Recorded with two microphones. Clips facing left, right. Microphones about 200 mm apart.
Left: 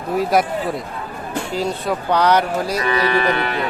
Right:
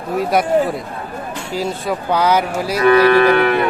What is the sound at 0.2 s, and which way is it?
Speech, centre (ahead or behind).